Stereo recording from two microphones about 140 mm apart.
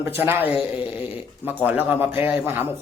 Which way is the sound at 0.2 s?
15° right (ahead or behind).